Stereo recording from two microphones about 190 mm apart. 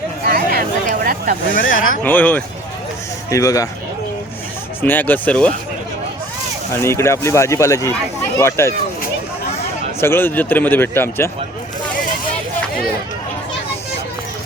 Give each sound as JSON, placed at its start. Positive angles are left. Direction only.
{"t": 0.3, "sound": "a sound", "side_deg": -50}
{"t": 1.5, "sound": "speech", "side_deg": 45}
{"t": 2.0, "sound": "speech", "side_deg": 10}
{"t": 4.8, "sound": "speech", "side_deg": 10}
{"t": 6.8, "sound": "speech", "side_deg": 15}
{"t": 10.0, "sound": "speech", "side_deg": 10}